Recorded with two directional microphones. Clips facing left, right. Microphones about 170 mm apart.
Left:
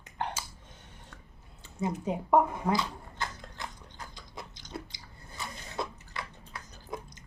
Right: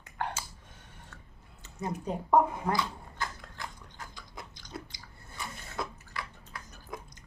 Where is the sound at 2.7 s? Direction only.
25° left (ahead or behind).